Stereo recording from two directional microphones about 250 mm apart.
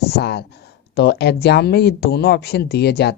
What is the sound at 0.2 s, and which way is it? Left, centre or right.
Speech, left.